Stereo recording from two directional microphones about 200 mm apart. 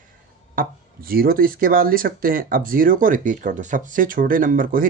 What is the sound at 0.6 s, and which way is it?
Speech, 45° right (ahead or behind).